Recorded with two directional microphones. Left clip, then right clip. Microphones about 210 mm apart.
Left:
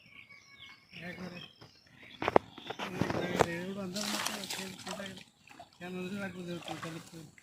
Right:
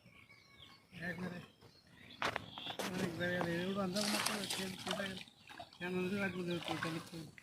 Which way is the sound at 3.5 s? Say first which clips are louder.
Even; 15° left (ahead or behind).